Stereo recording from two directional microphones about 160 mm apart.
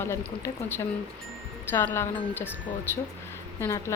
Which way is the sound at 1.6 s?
15° left (ahead or behind).